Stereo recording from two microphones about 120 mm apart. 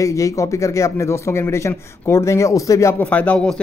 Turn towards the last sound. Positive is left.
turn(degrees=10)  # may be behind; listen again after turning